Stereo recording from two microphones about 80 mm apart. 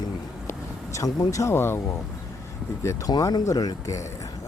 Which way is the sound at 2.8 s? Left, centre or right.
Left.